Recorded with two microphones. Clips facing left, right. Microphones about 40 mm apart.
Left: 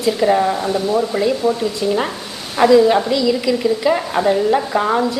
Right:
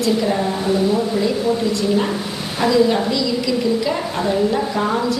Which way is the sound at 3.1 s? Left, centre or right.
Centre.